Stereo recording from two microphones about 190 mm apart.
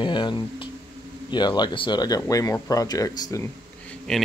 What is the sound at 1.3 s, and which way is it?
Speech, 25° left (ahead or behind).